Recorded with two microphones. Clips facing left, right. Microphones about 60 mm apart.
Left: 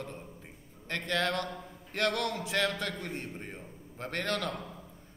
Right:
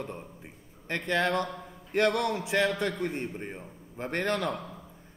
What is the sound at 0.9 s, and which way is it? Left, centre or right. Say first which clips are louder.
A man's voice: right 4 dB; centre.